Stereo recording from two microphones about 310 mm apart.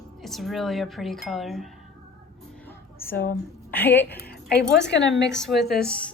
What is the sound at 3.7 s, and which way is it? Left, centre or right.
Speech, centre.